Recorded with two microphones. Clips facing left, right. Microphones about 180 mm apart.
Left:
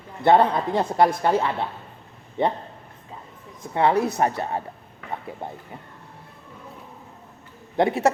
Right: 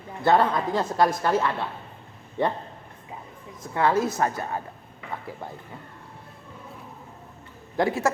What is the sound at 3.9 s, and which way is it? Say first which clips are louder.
Speech: left 2 dB; 65° left (ahead or behind).